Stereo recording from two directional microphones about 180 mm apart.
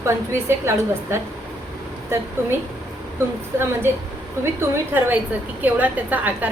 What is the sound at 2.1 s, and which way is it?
Speech, 15° right (ahead or behind).